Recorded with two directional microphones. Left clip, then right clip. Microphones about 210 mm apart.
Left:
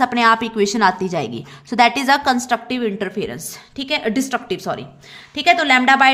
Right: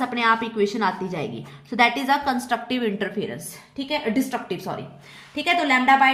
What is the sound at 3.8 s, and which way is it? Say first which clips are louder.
A woman's voice: left 4 dB; 40° left (ahead or behind).